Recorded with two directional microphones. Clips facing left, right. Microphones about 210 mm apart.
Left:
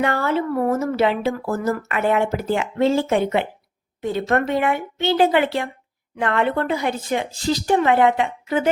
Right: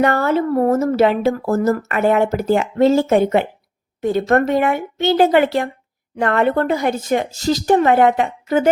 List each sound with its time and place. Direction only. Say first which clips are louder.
0.0 s speech: right 5 dB; 45° right (ahead or behind)